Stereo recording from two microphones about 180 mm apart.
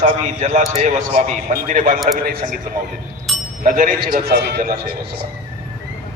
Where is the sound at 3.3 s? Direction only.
Centre (ahead or behind).